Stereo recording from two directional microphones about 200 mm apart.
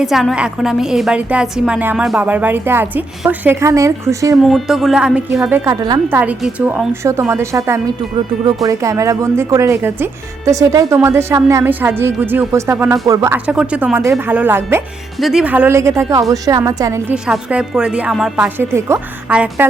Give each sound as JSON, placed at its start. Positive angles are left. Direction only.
{"t": 0.0, "sound": "speech", "side_deg": 0}
{"t": 4.4, "sound": "speech", "side_deg": 0}
{"t": 5.6, "sound": "speech", "side_deg": -15}